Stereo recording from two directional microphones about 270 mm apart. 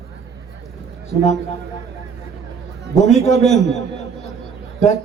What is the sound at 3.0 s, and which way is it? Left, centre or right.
A man's voice, left.